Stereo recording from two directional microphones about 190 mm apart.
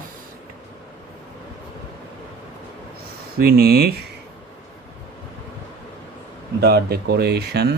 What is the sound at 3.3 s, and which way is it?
Speech, 55° right (ahead or behind).